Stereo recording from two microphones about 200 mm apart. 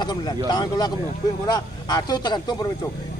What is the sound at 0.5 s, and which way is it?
Speech, 20° left (ahead or behind).